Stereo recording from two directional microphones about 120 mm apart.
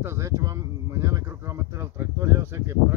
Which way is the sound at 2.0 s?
20° right (ahead or behind).